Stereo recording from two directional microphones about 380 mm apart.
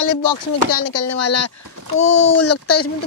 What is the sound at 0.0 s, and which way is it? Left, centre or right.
Speech, left.